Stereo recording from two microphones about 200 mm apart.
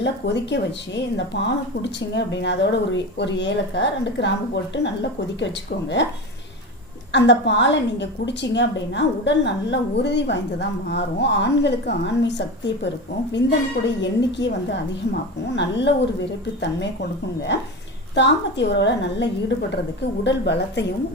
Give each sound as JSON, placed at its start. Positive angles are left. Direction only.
{"t": 0.5, "sound": "a woman's voice", "side_deg": 60}
{"t": 7.1, "sound": "a woman's voice", "side_deg": 60}